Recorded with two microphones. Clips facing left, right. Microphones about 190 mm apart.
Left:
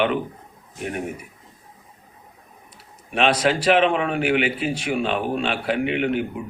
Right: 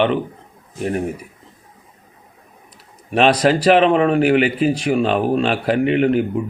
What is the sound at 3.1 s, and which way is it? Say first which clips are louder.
Speech: right 5 dB; 40° right (ahead or behind).